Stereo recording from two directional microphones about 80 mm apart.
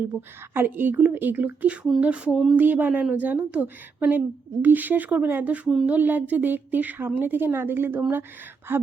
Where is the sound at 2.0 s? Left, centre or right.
Centre.